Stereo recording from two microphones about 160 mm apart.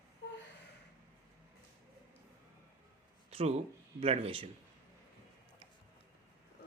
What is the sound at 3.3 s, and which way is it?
Speech, 40° right (ahead or behind).